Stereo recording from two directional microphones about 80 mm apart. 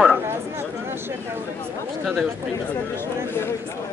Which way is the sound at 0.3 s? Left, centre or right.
Right.